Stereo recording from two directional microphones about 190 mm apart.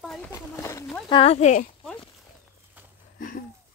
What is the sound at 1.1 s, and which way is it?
Speech, 30° left (ahead or behind).